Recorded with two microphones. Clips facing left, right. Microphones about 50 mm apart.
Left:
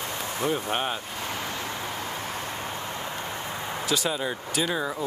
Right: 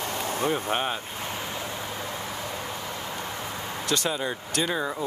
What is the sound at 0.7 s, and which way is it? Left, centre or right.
Speech, centre.